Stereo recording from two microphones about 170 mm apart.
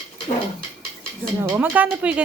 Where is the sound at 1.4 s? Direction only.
10° right (ahead or behind).